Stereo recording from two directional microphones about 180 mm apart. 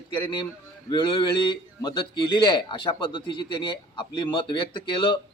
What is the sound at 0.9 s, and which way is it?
A man's voice, 25° left (ahead or behind).